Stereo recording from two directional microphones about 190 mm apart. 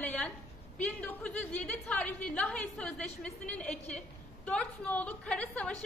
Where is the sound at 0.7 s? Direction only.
5° left (ahead or behind).